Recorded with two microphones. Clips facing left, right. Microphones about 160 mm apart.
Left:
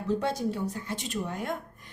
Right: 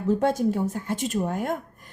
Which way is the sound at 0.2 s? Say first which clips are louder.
Right 7 dB; 50° right (ahead or behind).